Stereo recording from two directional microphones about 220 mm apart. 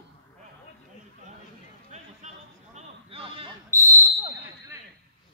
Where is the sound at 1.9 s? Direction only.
30° right (ahead or behind).